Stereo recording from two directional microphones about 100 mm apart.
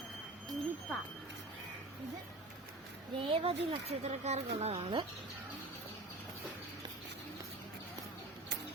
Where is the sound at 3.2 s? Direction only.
70° right (ahead or behind); by 4.9 s 90° right.